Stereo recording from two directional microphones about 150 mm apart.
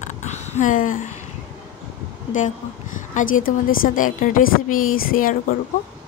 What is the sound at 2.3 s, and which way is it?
A woman's voice, 60° left (ahead or behind).